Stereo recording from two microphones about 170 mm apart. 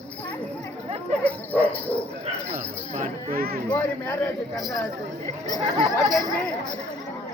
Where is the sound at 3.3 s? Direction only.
60° right (ahead or behind).